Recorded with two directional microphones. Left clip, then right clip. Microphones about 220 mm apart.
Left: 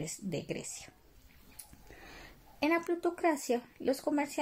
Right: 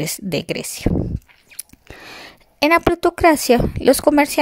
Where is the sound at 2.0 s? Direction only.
45° right (ahead or behind).